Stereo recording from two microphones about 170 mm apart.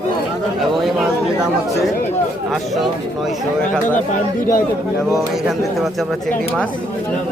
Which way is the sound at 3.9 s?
50° left (ahead or behind).